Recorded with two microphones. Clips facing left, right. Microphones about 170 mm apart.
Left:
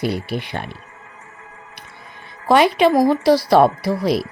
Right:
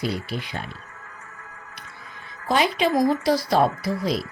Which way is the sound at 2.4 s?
65° left (ahead or behind).